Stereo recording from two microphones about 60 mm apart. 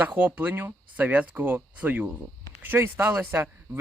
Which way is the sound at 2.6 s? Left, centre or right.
Right.